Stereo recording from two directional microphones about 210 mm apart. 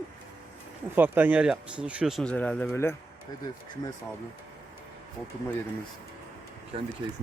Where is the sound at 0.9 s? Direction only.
10° right (ahead or behind); by 2.9 s 10° left (ahead or behind).